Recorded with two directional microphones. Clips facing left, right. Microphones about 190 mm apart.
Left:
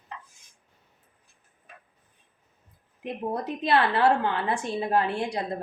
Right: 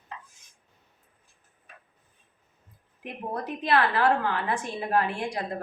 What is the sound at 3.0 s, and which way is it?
A woman's voice, 25° left (ahead or behind).